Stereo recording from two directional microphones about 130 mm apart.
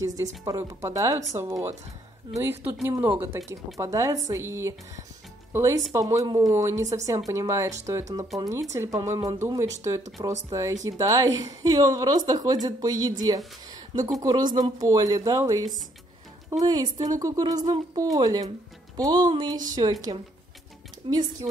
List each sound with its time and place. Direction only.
0.0 s a woman's voice: 25° right (ahead or behind)